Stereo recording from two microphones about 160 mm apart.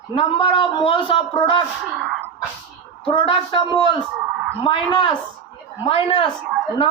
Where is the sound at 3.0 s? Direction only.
35° left (ahead or behind).